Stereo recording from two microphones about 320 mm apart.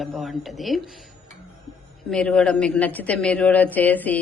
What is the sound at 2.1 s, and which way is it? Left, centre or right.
Speech, centre.